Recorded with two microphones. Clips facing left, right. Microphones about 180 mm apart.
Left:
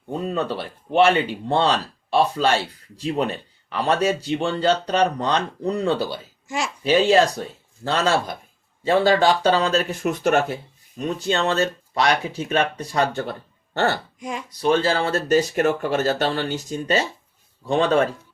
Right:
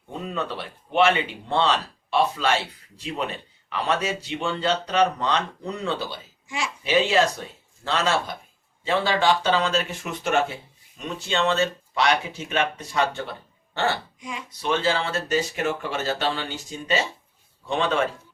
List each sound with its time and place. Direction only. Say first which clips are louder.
0.9 s speech: left 3 dB; 40° left (ahead or behind)